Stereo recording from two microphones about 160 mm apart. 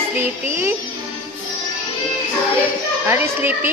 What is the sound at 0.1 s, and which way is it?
Speech, 15° right (ahead or behind).